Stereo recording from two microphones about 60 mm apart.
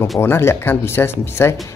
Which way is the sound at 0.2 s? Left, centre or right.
Left.